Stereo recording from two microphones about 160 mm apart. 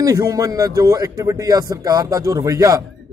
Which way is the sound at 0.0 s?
20° right (ahead or behind).